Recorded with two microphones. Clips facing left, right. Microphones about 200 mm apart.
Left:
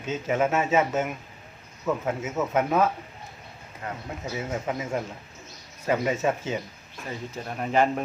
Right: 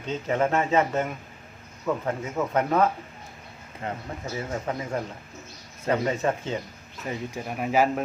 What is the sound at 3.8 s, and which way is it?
Speech, 25° right (ahead or behind).